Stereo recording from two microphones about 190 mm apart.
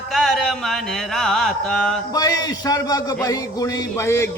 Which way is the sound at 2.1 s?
20° left (ahead or behind).